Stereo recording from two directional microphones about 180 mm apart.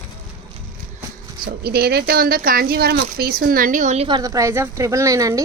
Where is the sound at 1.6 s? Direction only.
60° right (ahead or behind); by 4.1 s 40° right (ahead or behind).